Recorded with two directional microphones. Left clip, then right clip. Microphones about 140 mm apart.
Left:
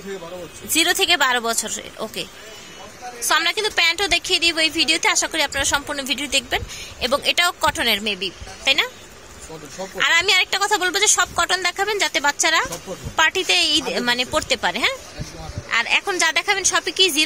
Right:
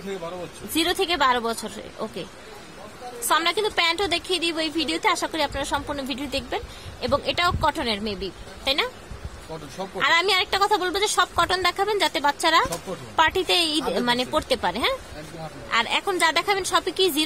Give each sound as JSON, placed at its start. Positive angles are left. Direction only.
{"t": 0.7, "sound": "a woman's voice", "side_deg": -10}
{"t": 3.3, "sound": "a woman's voice", "side_deg": -10}
{"t": 8.6, "sound": "a woman's voice", "side_deg": -15}
{"t": 9.9, "sound": "a woman's voice", "side_deg": -10}